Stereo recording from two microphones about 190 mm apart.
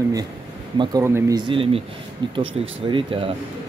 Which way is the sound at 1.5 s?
30° right (ahead or behind).